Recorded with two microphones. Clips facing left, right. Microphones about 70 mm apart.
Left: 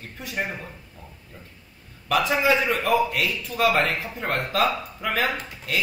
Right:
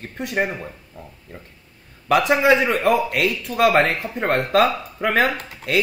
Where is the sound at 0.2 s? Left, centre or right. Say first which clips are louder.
Right 7 dB; right.